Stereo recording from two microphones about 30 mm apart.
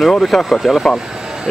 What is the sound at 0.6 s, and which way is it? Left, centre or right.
Speech, centre.